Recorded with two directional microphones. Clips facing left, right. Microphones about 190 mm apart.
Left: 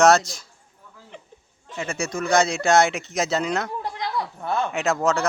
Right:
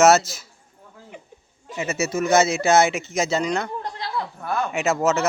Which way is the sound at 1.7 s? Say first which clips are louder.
Right 3 dB; 5° right (ahead or behind).